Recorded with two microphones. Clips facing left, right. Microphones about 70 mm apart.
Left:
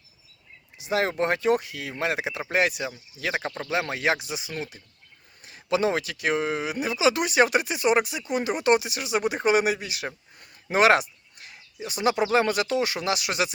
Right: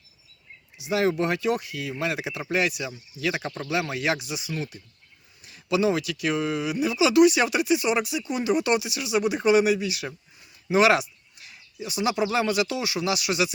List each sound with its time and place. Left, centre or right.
0.8 s speech: left